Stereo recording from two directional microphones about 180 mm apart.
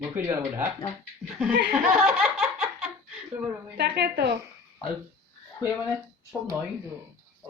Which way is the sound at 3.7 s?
60° right (ahead or behind).